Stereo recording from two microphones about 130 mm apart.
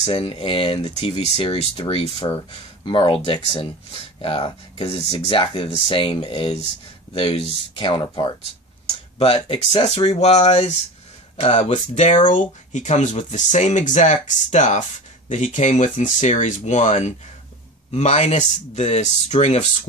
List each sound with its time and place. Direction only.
0.0 s speech: 50° left (ahead or behind)
1.3 s speech: 50° left (ahead or behind)
2.2 s speech: 35° left (ahead or behind)
9.2 s speech: 50° left (ahead or behind)